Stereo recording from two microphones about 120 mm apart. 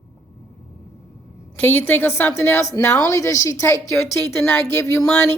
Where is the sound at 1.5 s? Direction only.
15° left (ahead or behind).